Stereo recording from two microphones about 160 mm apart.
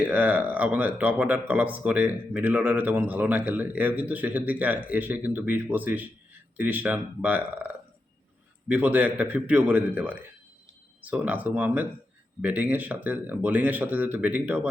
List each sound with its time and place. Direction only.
0.0 s speech: 10° right (ahead or behind)